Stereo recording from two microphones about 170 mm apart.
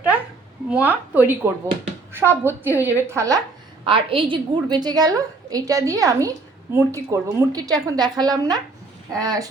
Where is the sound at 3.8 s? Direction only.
30° right (ahead or behind).